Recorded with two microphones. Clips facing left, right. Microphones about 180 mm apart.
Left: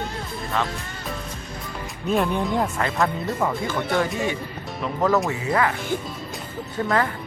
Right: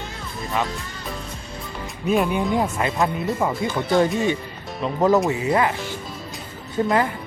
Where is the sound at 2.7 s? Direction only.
20° right (ahead or behind).